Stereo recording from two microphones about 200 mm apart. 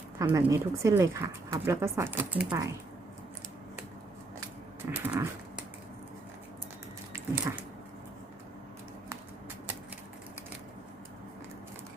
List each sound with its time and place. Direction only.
0.2 s speech: 15° right (ahead or behind)
4.9 s dog: 10° right (ahead or behind)
7.1 s dog: 10° right (ahead or behind)